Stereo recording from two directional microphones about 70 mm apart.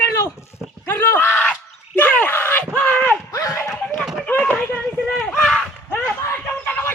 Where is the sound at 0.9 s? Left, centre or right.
Left.